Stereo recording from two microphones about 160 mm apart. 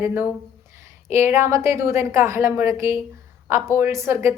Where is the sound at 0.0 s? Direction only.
15° right (ahead or behind).